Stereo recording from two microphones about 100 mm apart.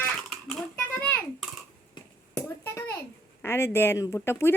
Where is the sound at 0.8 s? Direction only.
15° left (ahead or behind).